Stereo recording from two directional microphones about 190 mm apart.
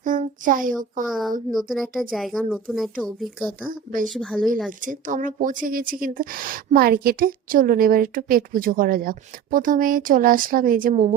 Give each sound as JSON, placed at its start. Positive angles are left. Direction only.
{"t": 0.0, "sound": "a sound", "side_deg": -45}
{"t": 1.0, "sound": "speech", "side_deg": 0}
{"t": 3.7, "sound": "a woman's voice", "side_deg": -45}
{"t": 4.1, "sound": "speech", "side_deg": 5}
{"t": 4.9, "sound": "a woman's voice", "side_deg": -45}